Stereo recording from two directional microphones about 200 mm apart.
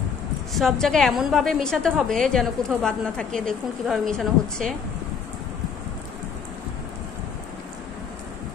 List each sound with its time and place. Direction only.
0.5 s a woman's voice: centre (ahead or behind)